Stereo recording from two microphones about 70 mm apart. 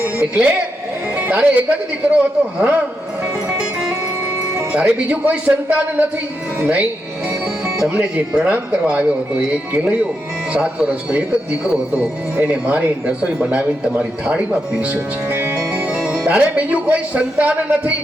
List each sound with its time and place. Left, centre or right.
0.0 s a man's voice: centre
4.7 s a man's voice: centre
7.8 s a man's voice: centre; by 15.8 s right
15.9 s speech: centre